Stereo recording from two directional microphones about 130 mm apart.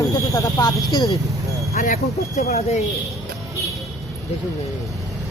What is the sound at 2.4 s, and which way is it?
Speech, 55° left (ahead or behind).